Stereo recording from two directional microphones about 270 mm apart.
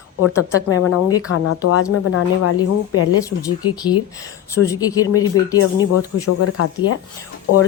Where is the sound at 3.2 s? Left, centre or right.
Centre.